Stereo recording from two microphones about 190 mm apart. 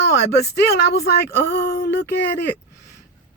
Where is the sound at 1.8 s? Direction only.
50° left (ahead or behind).